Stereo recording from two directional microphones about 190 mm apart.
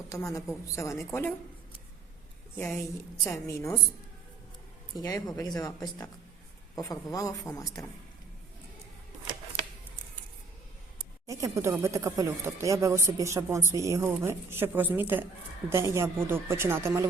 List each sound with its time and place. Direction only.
0.1 s a woman's voice: 15° left (ahead or behind)
2.6 s a woman's voice: 15° left (ahead or behind)
5.0 s a man's voice: 20° left (ahead or behind)
11.3 s speech: 15° right (ahead or behind)